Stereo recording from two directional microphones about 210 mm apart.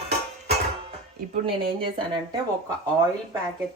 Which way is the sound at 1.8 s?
25° right (ahead or behind).